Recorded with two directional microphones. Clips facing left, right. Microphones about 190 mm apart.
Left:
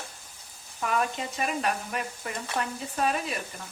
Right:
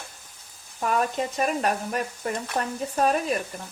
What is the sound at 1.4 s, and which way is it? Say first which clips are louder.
Stir: right 3 dB; 40° right (ahead or behind).